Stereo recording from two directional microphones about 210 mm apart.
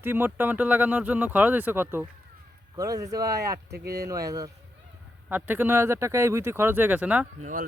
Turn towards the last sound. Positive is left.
turn(degrees=-35)  # may be behind; listen again after turning